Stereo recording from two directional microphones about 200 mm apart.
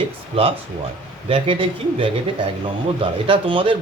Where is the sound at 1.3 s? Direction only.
25° right (ahead or behind).